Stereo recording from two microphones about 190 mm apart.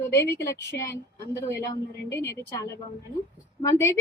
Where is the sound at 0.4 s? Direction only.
15° left (ahead or behind).